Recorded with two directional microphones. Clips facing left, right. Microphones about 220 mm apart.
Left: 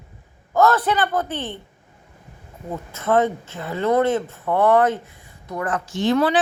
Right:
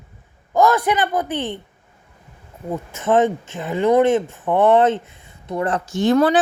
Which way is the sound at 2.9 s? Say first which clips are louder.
Right 2 dB; 20° right (ahead or behind).